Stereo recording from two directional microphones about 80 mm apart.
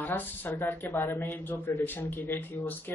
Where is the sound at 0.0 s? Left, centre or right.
Left.